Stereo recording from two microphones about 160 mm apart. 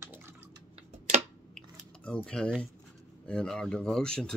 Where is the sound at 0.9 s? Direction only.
45° right (ahead or behind).